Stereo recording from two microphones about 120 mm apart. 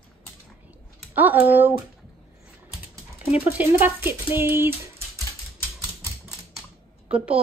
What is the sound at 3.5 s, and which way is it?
Speech, 15° right (ahead or behind).